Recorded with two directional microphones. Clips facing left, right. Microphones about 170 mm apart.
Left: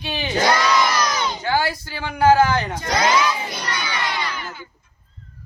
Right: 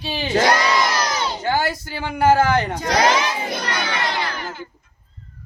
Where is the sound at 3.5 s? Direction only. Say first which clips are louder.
Right 3 dB; 50° right (ahead or behind).